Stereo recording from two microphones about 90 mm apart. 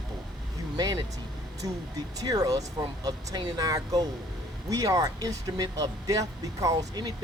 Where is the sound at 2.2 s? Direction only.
45° right (ahead or behind).